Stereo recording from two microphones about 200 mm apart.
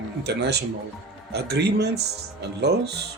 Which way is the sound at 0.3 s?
55° right (ahead or behind).